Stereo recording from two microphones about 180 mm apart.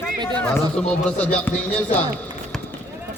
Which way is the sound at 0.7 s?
5° left (ahead or behind).